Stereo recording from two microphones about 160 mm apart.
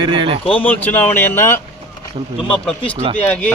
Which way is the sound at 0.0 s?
30° right (ahead or behind).